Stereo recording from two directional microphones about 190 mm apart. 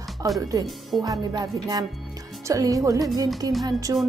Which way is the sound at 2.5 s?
15° right (ahead or behind).